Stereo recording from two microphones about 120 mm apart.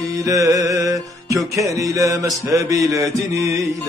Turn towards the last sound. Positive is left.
turn(degrees=-25)  # may be behind; listen again after turning